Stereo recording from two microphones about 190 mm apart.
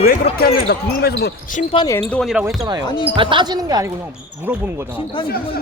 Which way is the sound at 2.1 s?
Centre (ahead or behind).